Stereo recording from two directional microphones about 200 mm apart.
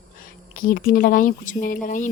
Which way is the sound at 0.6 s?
45° left (ahead or behind).